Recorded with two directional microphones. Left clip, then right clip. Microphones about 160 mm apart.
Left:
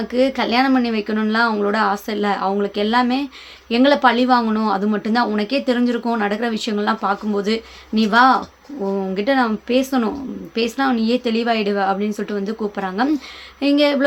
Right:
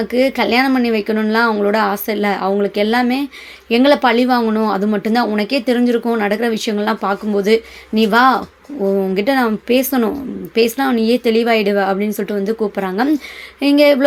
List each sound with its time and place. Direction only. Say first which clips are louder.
0.1 s speech: right 2 dB; 20° right (ahead or behind)